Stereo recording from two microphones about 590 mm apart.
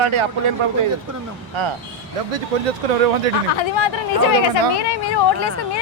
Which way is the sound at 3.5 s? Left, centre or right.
Left.